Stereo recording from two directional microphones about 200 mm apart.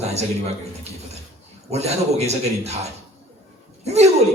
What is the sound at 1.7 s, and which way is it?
A man's voice, 30° right (ahead or behind).